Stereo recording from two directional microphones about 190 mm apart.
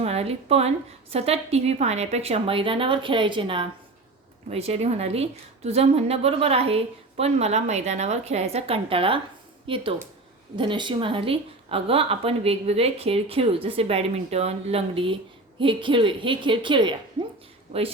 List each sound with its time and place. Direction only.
0.0 s a woman's voice: 35° right (ahead or behind)